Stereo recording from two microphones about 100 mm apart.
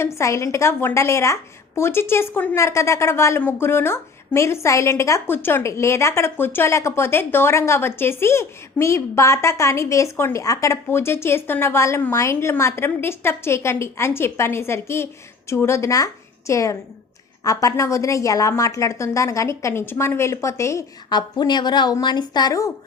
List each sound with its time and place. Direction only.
0.0 s a woman's voice: 30° left (ahead or behind)
21.1 s a woman's voice: 45° left (ahead or behind)